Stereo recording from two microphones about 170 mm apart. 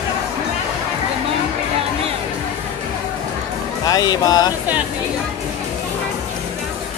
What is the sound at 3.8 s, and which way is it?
Speech, 25° left (ahead or behind).